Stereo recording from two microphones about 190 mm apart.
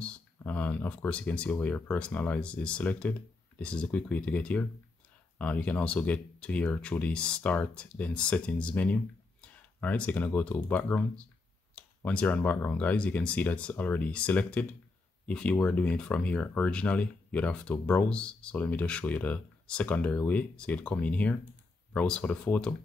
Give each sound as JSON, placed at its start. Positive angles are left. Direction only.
{"t": 0.0, "sound": "speech", "side_deg": 10}